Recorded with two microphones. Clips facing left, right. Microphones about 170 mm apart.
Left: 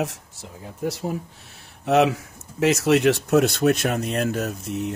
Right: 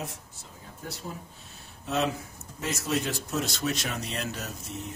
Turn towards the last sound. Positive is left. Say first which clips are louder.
# left 11 dB
turn(degrees=65)  # may be behind; listen again after turning